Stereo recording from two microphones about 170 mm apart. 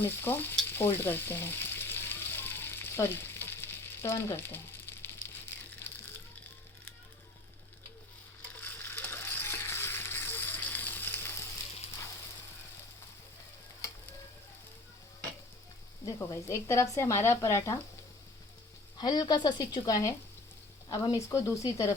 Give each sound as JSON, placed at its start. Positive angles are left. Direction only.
{"t": 0.0, "sound": "speech", "side_deg": 10}
{"t": 0.7, "sound": "frying", "side_deg": 15}
{"t": 8.6, "sound": "frying", "side_deg": 10}
{"t": 16.0, "sound": "speech", "side_deg": 15}
{"t": 18.9, "sound": "speech", "side_deg": 25}